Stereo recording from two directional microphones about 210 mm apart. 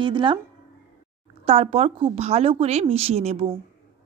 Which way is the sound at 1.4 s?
30° right (ahead or behind).